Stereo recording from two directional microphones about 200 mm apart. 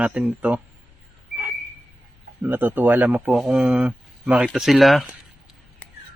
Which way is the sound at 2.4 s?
10° right (ahead or behind).